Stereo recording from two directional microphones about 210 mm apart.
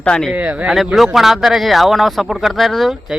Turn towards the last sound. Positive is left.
turn(degrees=0)  # may be behind; listen again after turning